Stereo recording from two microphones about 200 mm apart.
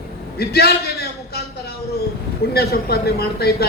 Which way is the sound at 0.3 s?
50° left (ahead or behind).